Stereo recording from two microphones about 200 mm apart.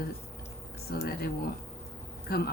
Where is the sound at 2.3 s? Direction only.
50° left (ahead or behind).